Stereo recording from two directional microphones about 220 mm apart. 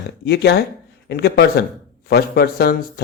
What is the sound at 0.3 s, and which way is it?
Speech, 50° left (ahead or behind).